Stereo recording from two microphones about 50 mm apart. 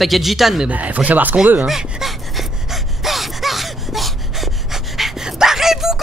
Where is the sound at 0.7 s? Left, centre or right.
Right.